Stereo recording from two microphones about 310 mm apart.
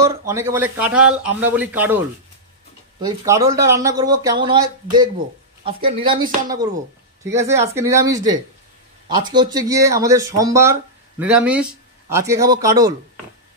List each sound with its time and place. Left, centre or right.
0.3 s speech: centre
3.0 s speech: centre